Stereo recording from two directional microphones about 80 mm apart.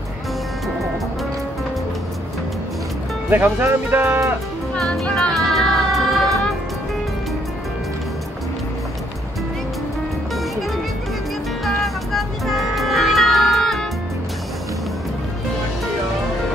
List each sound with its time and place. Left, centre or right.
3.3 s speech: right
4.7 s music: centre
5.0 s music: centre
5.3 s music: centre
11.6 s music: centre